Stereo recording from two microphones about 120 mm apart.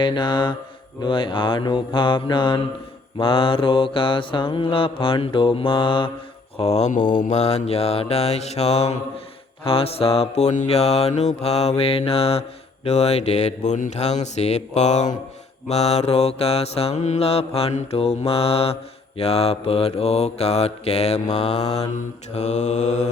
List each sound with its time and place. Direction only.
0.0 s mantra: 40° left (ahead or behind)
6.6 s mantra: 65° left (ahead or behind)
9.6 s mantra: 55° left (ahead or behind); by 15.2 s 80° left
15.7 s mantra: 65° left (ahead or behind)